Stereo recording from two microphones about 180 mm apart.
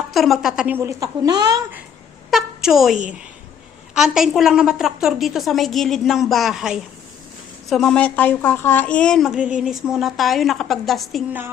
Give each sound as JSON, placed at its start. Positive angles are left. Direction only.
{"t": 0.1, "sound": "a woman's voice", "side_deg": 0}
{"t": 0.8, "sound": "speech", "side_deg": -20}
{"t": 2.3, "sound": "a woman's voice", "side_deg": 0}
{"t": 3.9, "sound": "a woman's voice", "side_deg": 0}